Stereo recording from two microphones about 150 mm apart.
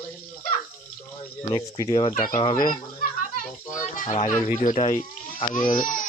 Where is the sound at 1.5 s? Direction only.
30° left (ahead or behind).